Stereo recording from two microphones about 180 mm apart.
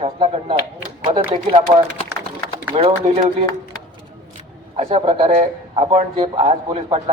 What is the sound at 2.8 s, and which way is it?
Speech, 35° right (ahead or behind).